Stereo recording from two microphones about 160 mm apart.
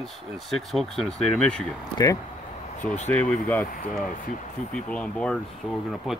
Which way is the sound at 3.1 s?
10° left (ahead or behind).